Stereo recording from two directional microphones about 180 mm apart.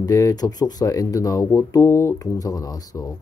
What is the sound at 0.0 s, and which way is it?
Speech, 20° left (ahead or behind).